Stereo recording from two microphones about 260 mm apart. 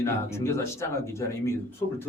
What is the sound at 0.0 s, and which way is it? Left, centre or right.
Speech, centre.